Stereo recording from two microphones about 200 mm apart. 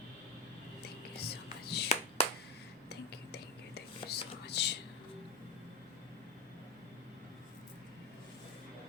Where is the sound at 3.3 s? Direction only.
55° left (ahead or behind).